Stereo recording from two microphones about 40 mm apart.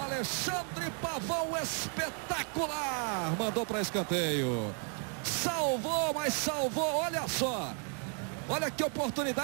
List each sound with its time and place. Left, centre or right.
0.0 s speech: centre
3.0 s speech: centre
3.3 s speech: centre
7.3 s speech: centre